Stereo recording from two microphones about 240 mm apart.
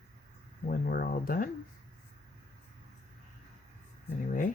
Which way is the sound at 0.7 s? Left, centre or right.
Left.